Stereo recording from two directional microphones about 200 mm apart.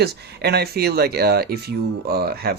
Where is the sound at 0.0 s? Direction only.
55° right (ahead or behind).